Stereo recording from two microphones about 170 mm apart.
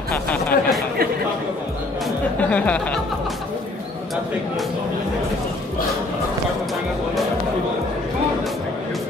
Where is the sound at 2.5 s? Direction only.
5° left (ahead or behind).